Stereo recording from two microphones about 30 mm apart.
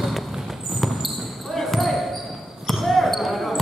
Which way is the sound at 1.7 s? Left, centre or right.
Centre.